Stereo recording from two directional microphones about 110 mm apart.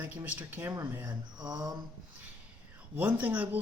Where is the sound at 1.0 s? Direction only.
40° right (ahead or behind).